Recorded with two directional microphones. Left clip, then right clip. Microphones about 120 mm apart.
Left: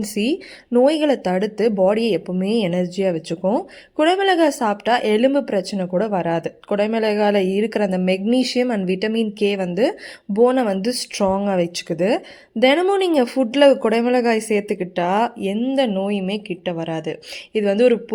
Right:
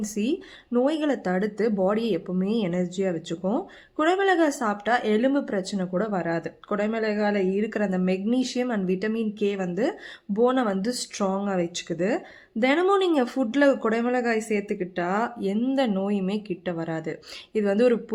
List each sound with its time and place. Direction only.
0.0 s a woman's voice: 45° left (ahead or behind)
15.5 s a woman's voice: 10° left (ahead or behind)